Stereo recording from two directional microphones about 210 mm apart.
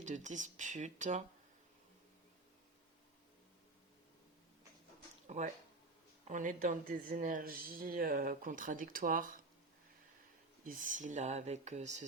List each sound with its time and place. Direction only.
0.0 s speech: 35° right (ahead or behind)
5.3 s speech: 30° right (ahead or behind)
10.6 s speech: 40° right (ahead or behind)